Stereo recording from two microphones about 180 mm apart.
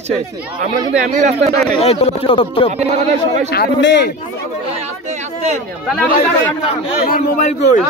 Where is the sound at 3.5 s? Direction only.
70° left (ahead or behind).